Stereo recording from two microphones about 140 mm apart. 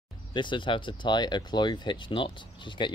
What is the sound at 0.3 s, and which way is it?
Speech, 35° left (ahead or behind).